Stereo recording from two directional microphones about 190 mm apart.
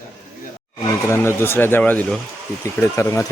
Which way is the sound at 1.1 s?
10° left (ahead or behind).